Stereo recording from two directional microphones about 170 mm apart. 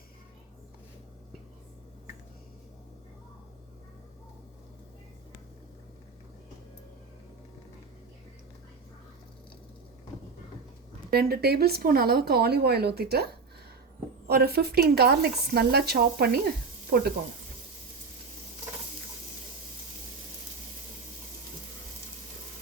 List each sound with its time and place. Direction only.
11.1 s speech: 65° right (ahead or behind)
14.3 s speech: 65° right (ahead or behind)